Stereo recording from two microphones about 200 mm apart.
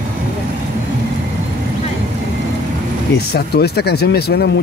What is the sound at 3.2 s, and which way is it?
Speech, 55° left (ahead or behind).